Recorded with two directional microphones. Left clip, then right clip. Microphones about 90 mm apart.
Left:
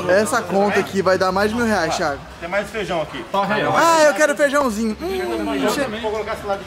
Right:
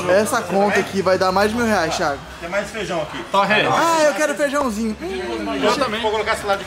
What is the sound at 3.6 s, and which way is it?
Speech, 20° left (ahead or behind).